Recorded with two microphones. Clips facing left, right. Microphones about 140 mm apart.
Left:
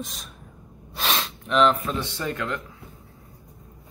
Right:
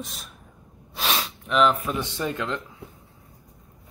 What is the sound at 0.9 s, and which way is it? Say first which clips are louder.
Gasp: even; 5° right (ahead or behind).